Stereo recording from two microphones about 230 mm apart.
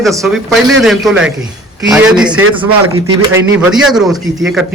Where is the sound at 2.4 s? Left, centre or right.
Right.